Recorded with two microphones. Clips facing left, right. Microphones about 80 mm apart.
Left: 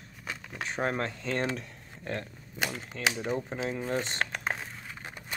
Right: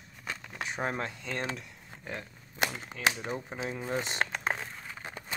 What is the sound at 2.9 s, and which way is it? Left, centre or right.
Speech, right.